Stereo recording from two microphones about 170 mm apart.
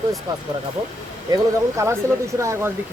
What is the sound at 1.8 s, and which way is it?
Speech, 15° right (ahead or behind).